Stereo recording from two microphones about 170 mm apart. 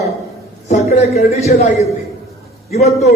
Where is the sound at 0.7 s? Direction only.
40° left (ahead or behind).